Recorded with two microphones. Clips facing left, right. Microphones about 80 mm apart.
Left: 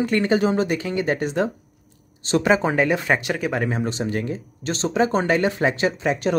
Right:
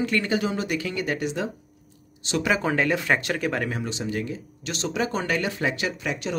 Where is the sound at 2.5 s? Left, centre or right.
Left.